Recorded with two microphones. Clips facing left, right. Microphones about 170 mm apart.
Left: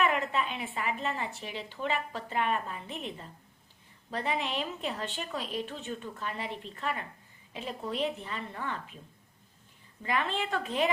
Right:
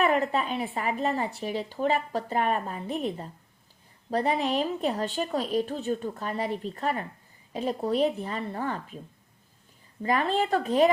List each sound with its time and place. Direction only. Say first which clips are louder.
0.0 s a woman's voice: right 4 dB; 40° right (ahead or behind)
10.0 s a woman's voice: right 6 dB; 40° right (ahead or behind)